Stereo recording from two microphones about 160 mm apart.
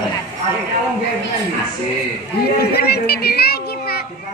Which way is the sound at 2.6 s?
80° left.